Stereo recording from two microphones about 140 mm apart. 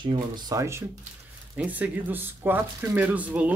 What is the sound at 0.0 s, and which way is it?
Speech, 30° right (ahead or behind).